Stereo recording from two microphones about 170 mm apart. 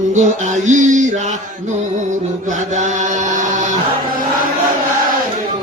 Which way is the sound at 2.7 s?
45° right (ahead or behind).